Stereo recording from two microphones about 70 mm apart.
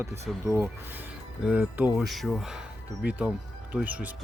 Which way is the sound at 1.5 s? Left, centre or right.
Right.